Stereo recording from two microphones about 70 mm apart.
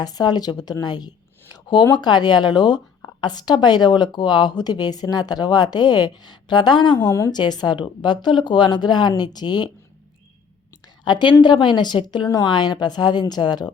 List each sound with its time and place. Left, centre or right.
0.0 s a woman's voice: left
11.0 s speech: left